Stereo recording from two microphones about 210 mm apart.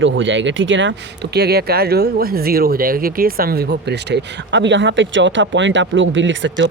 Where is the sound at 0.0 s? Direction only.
65° right (ahead or behind).